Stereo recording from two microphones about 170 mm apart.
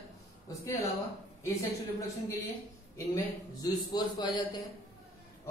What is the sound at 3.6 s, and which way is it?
Speech, 20° left (ahead or behind).